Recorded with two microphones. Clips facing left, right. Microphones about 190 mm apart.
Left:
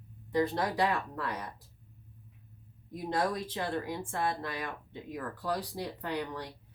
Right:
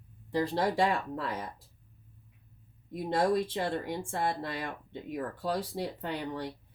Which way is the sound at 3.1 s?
25° right (ahead or behind).